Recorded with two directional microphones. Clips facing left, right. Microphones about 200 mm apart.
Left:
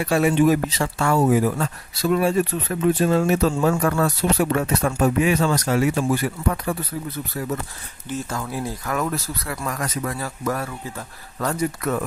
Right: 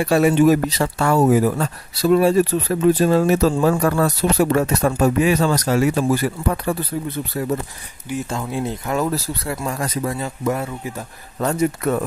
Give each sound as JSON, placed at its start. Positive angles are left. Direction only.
{"t": 0.0, "sound": "speech", "side_deg": -40}